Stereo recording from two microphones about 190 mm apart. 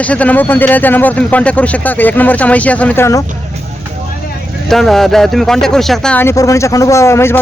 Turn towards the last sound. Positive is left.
turn(degrees=15)  # may be behind; listen again after turning